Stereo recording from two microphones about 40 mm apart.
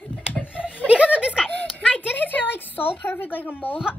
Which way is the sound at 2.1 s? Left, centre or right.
Left.